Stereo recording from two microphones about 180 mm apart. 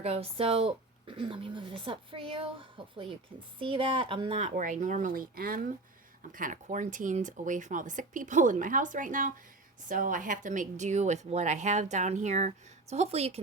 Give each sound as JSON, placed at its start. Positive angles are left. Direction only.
{"t": 0.0, "sound": "a woman's voice", "side_deg": -35}